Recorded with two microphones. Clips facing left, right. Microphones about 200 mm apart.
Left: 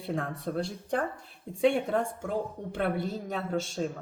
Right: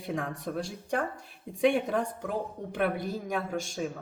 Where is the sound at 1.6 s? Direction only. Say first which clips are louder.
Even; 15° right (ahead or behind).